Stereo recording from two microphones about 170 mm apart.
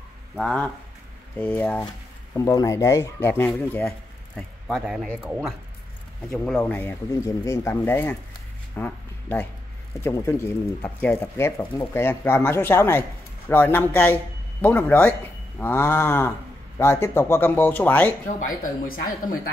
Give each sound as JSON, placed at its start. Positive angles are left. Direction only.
{"t": 0.4, "sound": "speech", "side_deg": 5}
{"t": 4.6, "sound": "speech", "side_deg": 0}
{"t": 6.3, "sound": "speech", "side_deg": 10}
{"t": 18.3, "sound": "speech", "side_deg": 50}